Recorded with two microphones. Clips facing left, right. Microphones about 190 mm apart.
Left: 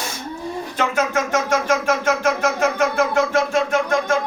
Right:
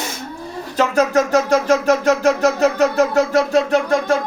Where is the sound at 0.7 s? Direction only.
35° right (ahead or behind).